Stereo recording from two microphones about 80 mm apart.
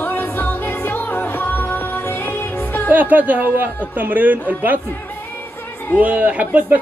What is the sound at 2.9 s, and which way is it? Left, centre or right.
A man's voice, right.